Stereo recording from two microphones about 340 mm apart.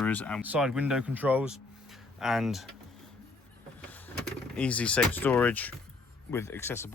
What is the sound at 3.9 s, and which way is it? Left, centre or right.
Speech, centre.